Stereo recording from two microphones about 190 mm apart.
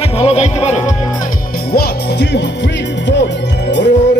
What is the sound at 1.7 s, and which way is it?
Music, 60° left (ahead or behind).